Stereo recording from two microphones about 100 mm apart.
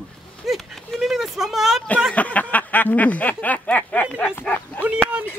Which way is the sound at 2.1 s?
15° left (ahead or behind).